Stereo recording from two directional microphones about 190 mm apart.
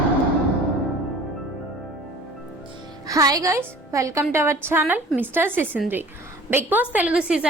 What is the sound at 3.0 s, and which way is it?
A woman's voice, 20° right (ahead or behind).